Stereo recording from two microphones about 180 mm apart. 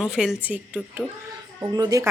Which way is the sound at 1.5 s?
20° right (ahead or behind).